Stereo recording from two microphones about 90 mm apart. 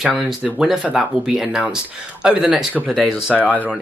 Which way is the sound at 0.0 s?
5° right (ahead or behind).